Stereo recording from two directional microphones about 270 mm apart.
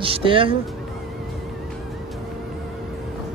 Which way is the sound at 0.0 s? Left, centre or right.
Centre.